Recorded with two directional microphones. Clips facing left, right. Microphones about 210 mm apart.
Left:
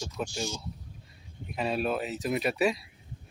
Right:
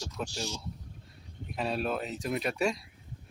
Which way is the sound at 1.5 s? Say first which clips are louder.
Left 2 dB; centre (ahead or behind).